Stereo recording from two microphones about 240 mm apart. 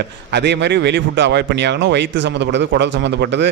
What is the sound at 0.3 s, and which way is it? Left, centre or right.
A man's voice, right.